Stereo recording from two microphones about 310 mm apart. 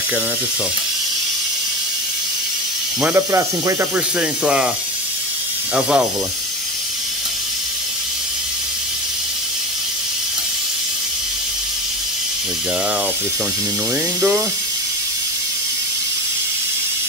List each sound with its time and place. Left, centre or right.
3.0 s speech: centre
5.8 s speech: centre